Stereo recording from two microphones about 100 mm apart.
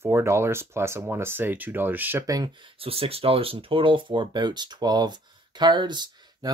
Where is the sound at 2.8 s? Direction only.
75° right (ahead or behind).